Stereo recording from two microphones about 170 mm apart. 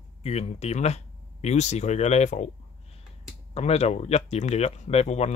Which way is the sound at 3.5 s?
40° left (ahead or behind).